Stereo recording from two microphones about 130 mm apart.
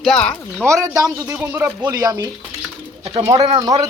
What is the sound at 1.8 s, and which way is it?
Speech, 30° right (ahead or behind).